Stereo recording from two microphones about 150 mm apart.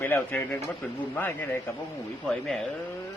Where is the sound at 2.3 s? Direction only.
5° left (ahead or behind).